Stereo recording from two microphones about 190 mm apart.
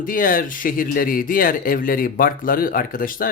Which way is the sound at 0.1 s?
50° left (ahead or behind).